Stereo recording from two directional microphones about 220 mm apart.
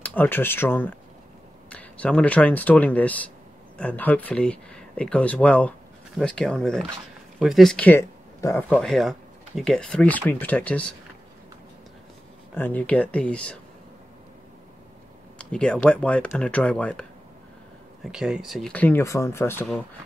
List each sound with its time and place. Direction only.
0.0 s speech: 10° left (ahead or behind)
8.7 s speech: centre (ahead or behind)
12.5 s speech: 10° left (ahead or behind)
15.3 s speech: 5° left (ahead or behind)
18.0 s speech: centre (ahead or behind)